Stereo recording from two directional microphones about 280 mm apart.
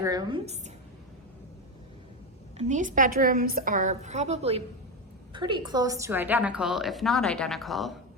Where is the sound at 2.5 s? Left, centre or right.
Right; by 7.9 s centre.